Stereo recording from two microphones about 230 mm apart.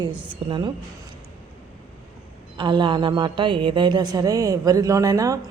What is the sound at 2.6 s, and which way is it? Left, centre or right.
A woman's voice, centre.